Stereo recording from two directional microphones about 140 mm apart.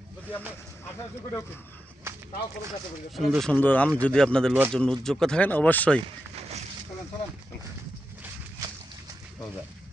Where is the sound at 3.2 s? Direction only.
Centre (ahead or behind).